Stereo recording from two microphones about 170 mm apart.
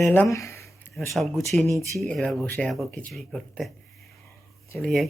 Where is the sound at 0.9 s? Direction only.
Centre (ahead or behind).